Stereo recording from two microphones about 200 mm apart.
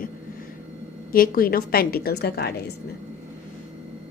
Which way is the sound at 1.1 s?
45° left (ahead or behind).